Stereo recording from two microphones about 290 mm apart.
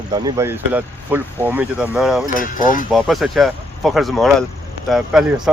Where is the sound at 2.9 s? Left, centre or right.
Centre.